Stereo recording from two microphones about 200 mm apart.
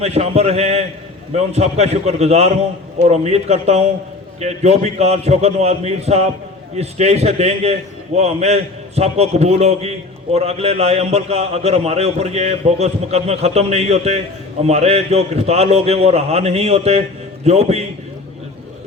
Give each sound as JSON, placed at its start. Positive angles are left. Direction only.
{"t": 0.0, "sound": "a man's voice", "side_deg": -30}